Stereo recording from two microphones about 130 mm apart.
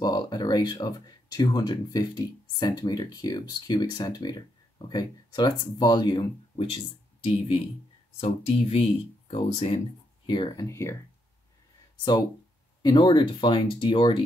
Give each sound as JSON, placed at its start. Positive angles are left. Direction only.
{"t": 0.0, "sound": "speech", "side_deg": 30}
{"t": 10.2, "sound": "speech", "side_deg": 40}
{"t": 10.6, "sound": "speech", "side_deg": 20}
{"t": 12.8, "sound": "speech", "side_deg": 35}